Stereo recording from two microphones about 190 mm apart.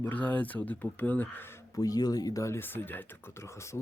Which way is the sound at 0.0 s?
10° left (ahead or behind).